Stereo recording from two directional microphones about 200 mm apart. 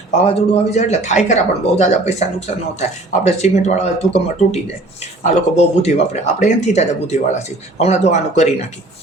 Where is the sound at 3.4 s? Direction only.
35° left (ahead or behind).